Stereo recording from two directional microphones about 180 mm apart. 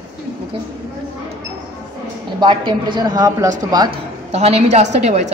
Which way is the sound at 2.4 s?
25° right (ahead or behind).